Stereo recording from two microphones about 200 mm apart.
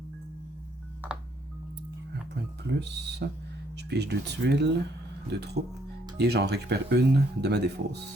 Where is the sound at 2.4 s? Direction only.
60° right (ahead or behind).